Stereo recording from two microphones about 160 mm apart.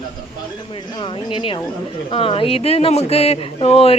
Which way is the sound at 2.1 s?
35° left (ahead or behind).